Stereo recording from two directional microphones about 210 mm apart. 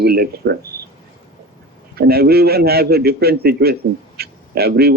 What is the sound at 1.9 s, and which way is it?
A man's voice, 50° right (ahead or behind).